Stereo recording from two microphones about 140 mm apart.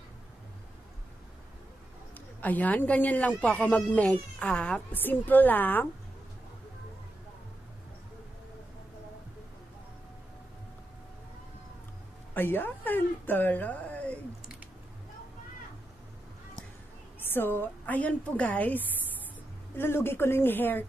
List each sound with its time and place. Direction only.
2.1 s speech: 10° left (ahead or behind)
12.4 s speech: 15° left (ahead or behind)
17.2 s speech: 15° left (ahead or behind)